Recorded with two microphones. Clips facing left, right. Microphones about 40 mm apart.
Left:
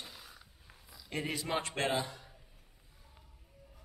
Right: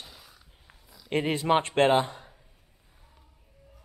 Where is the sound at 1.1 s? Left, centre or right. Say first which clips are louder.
Right 11 dB; right.